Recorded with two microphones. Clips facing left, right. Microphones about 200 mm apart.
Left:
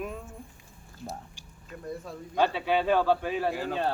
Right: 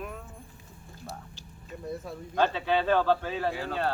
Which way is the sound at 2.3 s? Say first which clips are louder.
Even; 10° left (ahead or behind).